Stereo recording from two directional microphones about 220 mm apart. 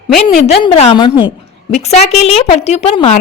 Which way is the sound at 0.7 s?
25° left (ahead or behind).